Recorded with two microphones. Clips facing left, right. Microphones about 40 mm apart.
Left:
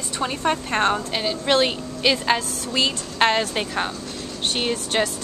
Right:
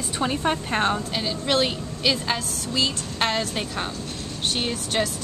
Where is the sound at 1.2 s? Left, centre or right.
Centre.